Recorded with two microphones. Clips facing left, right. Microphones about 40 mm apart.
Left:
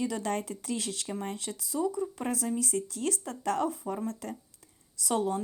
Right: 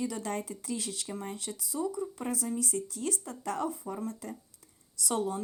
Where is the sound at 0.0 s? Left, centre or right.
Left.